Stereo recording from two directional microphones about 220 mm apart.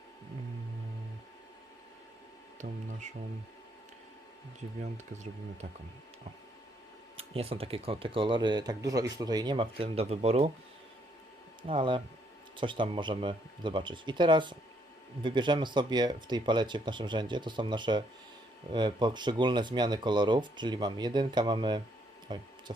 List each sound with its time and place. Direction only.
2.6 s speech: 35° right (ahead or behind)
4.8 s speech: 30° right (ahead or behind)
7.2 s speech: 25° right (ahead or behind)
11.6 s speech: 25° right (ahead or behind)